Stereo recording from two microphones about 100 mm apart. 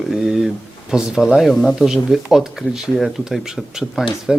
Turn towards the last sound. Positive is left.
turn(degrees=-5)  # may be behind; listen again after turning